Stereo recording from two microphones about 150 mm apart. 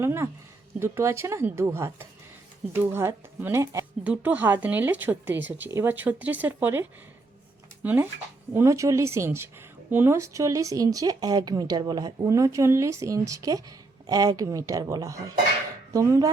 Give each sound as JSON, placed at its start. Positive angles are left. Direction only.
{"t": 0.0, "sound": "speech", "side_deg": -15}
{"t": 4.0, "sound": "speech", "side_deg": -10}